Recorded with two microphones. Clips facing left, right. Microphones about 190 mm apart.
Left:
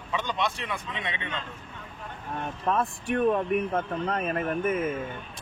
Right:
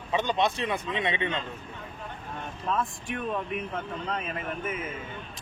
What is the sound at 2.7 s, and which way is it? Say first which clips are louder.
Speech: left 4 dB; 60° left (ahead or behind).